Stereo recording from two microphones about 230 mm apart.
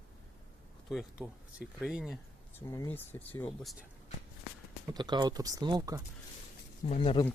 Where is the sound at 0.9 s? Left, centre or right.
Centre.